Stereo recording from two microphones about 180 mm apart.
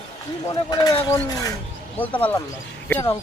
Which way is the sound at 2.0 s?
10° left (ahead or behind).